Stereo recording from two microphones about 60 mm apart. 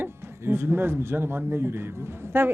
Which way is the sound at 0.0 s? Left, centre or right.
Right.